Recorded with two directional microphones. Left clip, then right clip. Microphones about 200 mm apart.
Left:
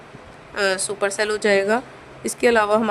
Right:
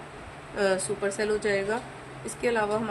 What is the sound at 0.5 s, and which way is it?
Speech, 60° left (ahead or behind).